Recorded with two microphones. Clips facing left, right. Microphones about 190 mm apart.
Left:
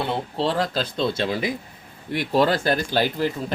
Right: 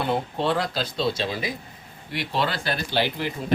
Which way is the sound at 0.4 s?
45° left (ahead or behind).